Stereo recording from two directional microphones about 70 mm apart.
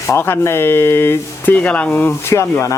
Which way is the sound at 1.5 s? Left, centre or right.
Left.